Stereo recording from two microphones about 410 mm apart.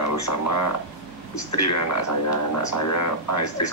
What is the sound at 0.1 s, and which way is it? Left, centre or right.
Speech, left.